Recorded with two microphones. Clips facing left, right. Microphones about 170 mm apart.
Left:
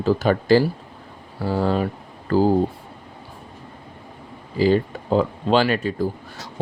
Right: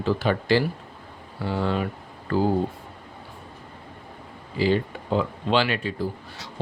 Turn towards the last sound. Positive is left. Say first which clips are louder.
# left 5 dB
turn(degrees=45)  # may be behind; listen again after turning